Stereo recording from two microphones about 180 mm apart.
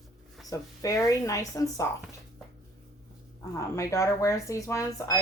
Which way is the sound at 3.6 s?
15° left (ahead or behind).